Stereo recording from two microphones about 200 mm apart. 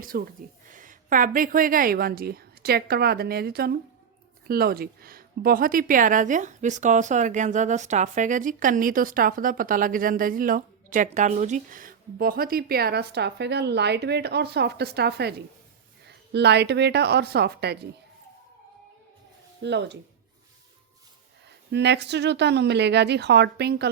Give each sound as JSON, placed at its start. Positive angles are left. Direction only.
{"t": 0.1, "sound": "a woman's voice", "side_deg": -50}
{"t": 19.6, "sound": "a woman's voice", "side_deg": -60}
{"t": 21.7, "sound": "a woman's voice", "side_deg": -60}